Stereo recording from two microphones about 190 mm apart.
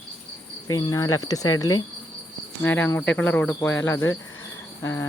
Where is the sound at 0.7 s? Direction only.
20° left (ahead or behind).